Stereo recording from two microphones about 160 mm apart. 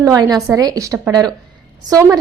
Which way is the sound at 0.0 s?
20° right (ahead or behind).